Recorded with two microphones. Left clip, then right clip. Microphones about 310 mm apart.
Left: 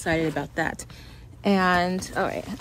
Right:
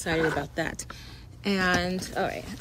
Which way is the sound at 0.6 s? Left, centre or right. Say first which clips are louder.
Left 4 dB; centre.